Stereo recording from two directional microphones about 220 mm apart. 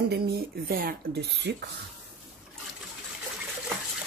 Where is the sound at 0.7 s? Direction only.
40° right (ahead or behind).